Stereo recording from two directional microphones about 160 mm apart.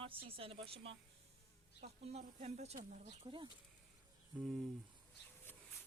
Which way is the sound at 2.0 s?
45° right (ahead or behind).